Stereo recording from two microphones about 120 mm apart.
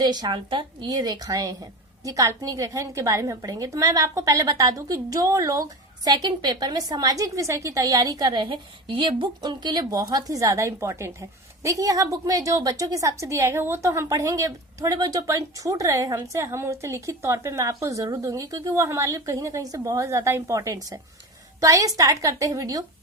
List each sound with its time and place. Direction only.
0.0 s a woman's voice: 35° right (ahead or behind)